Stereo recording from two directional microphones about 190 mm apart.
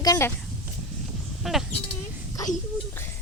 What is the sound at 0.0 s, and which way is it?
Speech, 15° left (ahead or behind).